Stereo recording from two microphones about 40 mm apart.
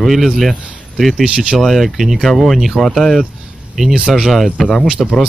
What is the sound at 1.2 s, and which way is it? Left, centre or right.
Speech, right.